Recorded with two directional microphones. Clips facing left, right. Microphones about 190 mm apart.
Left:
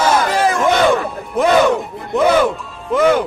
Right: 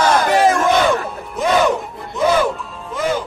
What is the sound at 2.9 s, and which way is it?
Music, 60° left (ahead or behind).